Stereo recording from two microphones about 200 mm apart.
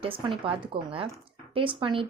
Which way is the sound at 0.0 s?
25° right (ahead or behind).